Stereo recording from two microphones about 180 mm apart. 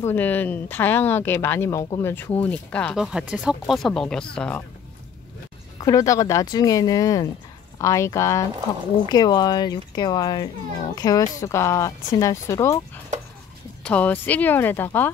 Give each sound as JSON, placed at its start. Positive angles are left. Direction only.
{"t": 0.0, "sound": "speech", "side_deg": 10}
{"t": 5.8, "sound": "speech", "side_deg": 20}
{"t": 13.8, "sound": "speech", "side_deg": 10}